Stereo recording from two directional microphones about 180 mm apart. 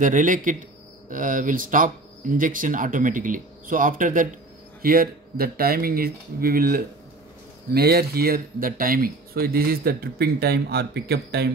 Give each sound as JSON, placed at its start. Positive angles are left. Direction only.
{"t": 0.0, "sound": "speech", "side_deg": -45}